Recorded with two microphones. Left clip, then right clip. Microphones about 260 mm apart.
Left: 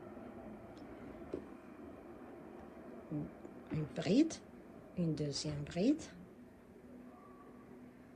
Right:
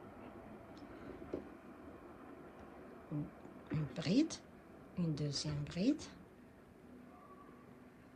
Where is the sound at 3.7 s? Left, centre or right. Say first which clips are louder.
Left 3 dB; right.